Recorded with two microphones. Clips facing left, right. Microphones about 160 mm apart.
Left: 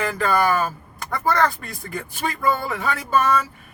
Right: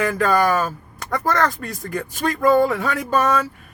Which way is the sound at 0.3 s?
40° right (ahead or behind).